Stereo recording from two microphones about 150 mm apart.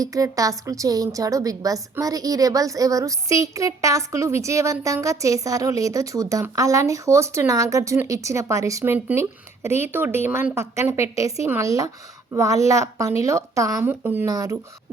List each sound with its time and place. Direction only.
0.0 s a woman's voice: 25° right (ahead or behind)
14.3 s a woman's voice: 25° right (ahead or behind)